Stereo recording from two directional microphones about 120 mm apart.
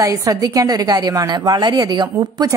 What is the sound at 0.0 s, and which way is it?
A woman's voice, 30° right (ahead or behind).